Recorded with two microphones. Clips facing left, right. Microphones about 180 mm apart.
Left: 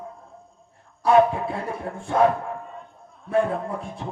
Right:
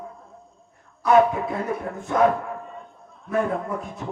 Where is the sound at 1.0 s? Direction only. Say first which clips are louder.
Even; 30° left (ahead or behind).